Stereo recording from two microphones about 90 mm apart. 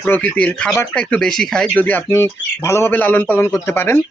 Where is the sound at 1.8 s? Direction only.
20° left (ahead or behind).